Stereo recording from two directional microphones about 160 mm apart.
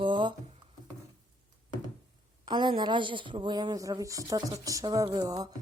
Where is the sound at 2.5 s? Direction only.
30° right (ahead or behind).